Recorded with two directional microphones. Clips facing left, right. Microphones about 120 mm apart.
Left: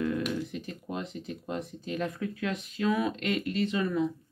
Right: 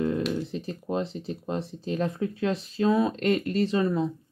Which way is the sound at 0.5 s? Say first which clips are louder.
Right 6 dB; 30° right (ahead or behind).